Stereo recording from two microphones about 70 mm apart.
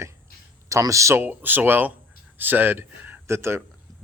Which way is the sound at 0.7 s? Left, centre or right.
Right.